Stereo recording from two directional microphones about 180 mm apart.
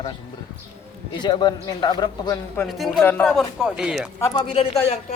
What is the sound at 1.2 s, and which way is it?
Speech, 25° left (ahead or behind).